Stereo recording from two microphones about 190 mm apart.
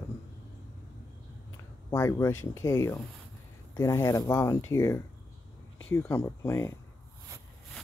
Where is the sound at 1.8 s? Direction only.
15° left (ahead or behind).